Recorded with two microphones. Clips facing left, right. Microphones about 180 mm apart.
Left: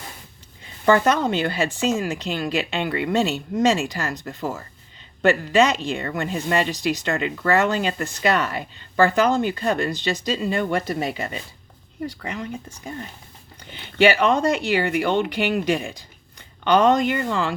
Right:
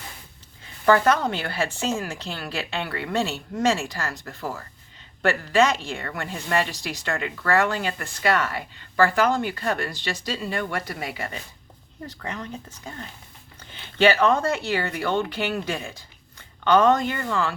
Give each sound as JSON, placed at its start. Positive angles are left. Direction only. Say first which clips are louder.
{"t": 0.9, "sound": "a woman's voice", "louder": "left 1 dB", "side_deg": 20}